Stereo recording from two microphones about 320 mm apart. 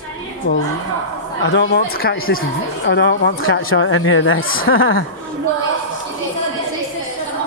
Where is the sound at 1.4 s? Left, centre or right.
Left.